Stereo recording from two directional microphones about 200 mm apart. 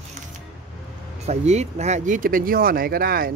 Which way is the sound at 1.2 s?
35° right (ahead or behind).